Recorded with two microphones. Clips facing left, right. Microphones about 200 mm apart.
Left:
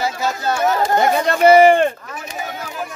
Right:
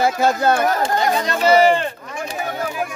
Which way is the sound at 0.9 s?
55° left (ahead or behind).